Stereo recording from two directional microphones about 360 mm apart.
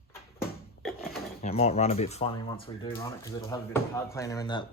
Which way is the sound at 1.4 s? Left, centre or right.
Centre.